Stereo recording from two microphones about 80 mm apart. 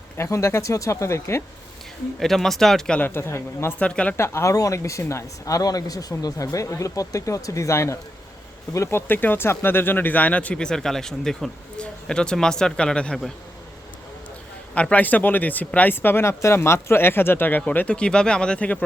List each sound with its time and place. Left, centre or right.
0.2 s speech: left
2.1 s speech: centre
3.0 s speech: left
3.8 s speech: centre
4.2 s speech: left; by 13.1 s centre
14.8 s speech: centre